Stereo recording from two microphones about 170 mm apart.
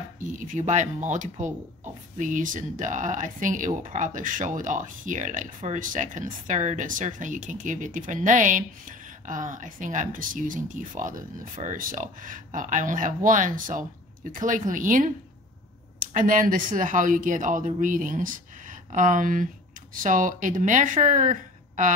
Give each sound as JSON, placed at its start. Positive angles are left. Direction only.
{"t": 0.4, "sound": "speech", "side_deg": -45}